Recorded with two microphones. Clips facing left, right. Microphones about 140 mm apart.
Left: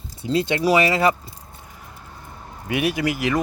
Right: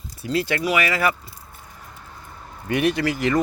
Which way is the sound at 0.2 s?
20° left (ahead or behind).